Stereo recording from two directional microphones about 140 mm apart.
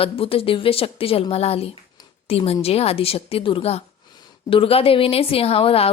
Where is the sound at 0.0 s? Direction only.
40° left (ahead or behind).